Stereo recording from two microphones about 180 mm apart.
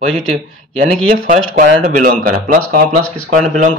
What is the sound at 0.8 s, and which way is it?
Speech, 45° right (ahead or behind).